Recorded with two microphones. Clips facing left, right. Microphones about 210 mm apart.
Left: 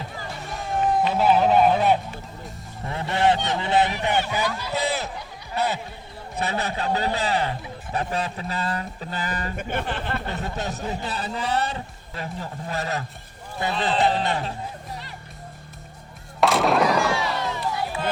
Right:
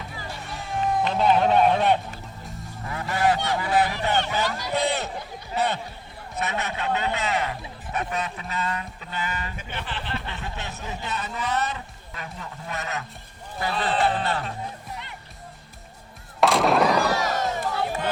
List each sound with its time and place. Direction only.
1.0 s a man's voice: 5° left (ahead or behind)
2.8 s honk: 25° left (ahead or behind)
3.9 s speech: 15° left (ahead or behind)
6.3 s speech: 30° left (ahead or behind)
9.6 s speech: 50° left (ahead or behind); by 14.5 s 25° left (ahead or behind)
16.4 s music: centre (ahead or behind)
17.1 s crowd: 40° right (ahead or behind)